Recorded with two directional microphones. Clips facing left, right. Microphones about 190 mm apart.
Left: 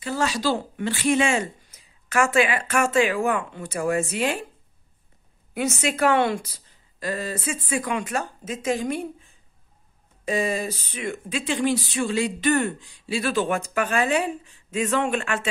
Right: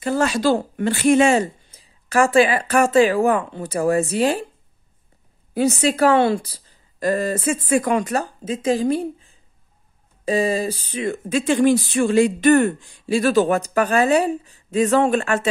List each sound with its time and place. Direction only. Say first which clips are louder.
0.0 s speech: right 6 dB; 50° right (ahead or behind); by 4.5 s 35° right (ahead or behind)
5.5 s speech: right 7 dB; 35° right (ahead or behind)
7.0 s speech: right 8 dB; 45° right (ahead or behind)